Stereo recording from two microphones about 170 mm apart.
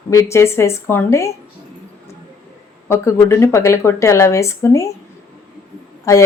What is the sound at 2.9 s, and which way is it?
Speech, 15° left (ahead or behind).